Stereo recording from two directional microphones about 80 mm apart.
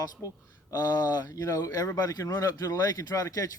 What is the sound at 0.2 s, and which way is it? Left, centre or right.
Speech, left.